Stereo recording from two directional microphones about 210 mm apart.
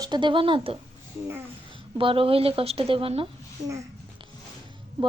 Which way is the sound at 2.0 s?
25° right (ahead or behind).